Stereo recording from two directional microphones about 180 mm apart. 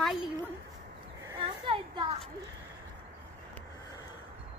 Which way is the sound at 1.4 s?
30° right (ahead or behind).